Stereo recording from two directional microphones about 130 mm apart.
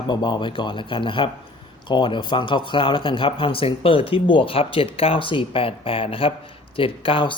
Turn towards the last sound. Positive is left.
turn(degrees=40)  # may be behind; listen again after turning